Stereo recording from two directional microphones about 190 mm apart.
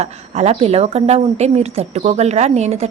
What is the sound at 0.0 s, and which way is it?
A woman's voice, 35° right (ahead or behind).